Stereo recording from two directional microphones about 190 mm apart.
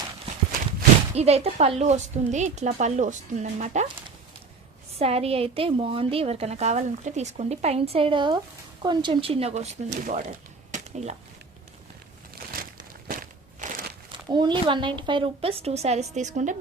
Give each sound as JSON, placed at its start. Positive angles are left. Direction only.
{"t": 1.1, "sound": "a woman's voice", "side_deg": -35}
{"t": 4.9, "sound": "a woman's voice", "side_deg": -30}
{"t": 12.5, "sound": "crumpling", "side_deg": -45}
{"t": 14.1, "sound": "speech", "side_deg": -25}